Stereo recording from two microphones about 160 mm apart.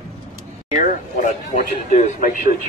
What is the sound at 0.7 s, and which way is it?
Speech, 50° left (ahead or behind).